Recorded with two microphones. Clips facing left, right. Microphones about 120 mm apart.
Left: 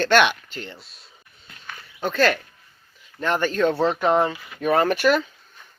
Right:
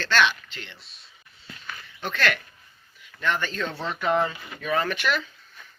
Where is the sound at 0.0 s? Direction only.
55° left (ahead or behind).